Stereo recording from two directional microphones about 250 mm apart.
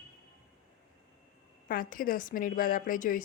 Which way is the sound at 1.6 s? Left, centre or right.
Left.